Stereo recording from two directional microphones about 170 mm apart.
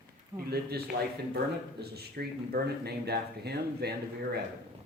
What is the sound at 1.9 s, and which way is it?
Speech, 65° right (ahead or behind).